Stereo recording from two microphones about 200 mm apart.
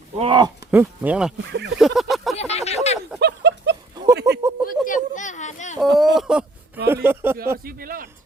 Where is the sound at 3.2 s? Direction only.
60° right (ahead or behind).